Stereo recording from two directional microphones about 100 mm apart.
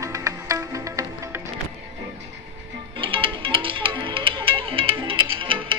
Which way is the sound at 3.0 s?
60° right (ahead or behind).